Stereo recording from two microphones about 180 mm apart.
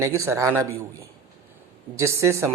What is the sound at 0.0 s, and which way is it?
Speech, 15° right (ahead or behind).